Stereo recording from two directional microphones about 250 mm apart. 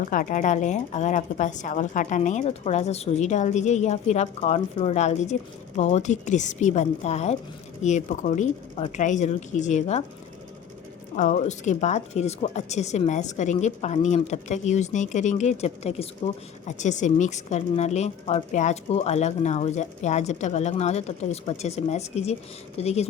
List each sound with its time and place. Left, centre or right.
0.1 s speech: left
11.2 s speech: left